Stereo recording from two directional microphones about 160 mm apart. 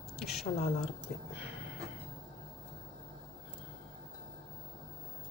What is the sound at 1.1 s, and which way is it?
Speech, 55° left (ahead or behind).